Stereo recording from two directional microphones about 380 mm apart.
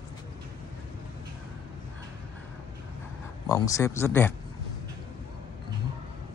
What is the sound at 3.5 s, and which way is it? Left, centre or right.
Speech, centre.